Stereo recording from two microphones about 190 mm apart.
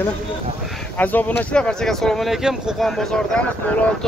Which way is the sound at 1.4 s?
5° left (ahead or behind).